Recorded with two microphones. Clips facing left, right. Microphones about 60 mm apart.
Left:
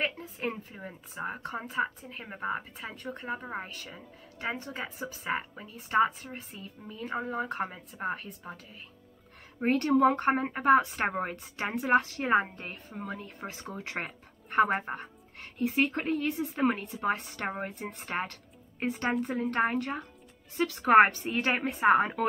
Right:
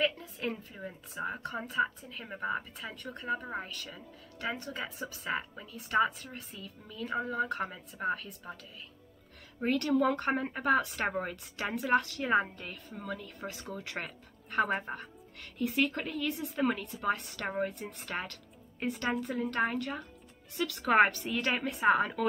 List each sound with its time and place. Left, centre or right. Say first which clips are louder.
0.0 s a sound: right 1 dB; left
1.1 s speech: left 1 dB; left
2.2 s a woman's voice: left 1 dB; centre
2.5 s speech: left 1 dB; left